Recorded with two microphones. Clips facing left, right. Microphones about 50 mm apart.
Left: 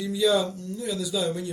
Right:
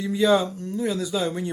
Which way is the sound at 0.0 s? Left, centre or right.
Right.